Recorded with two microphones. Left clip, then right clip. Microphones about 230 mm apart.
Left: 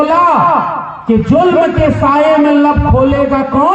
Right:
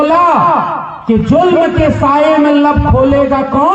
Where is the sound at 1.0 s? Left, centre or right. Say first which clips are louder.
Even; right.